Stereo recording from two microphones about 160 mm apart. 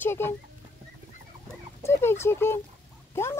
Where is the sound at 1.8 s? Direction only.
15° left (ahead or behind).